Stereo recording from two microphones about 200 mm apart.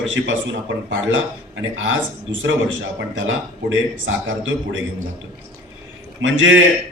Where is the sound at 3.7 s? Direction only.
75° right (ahead or behind).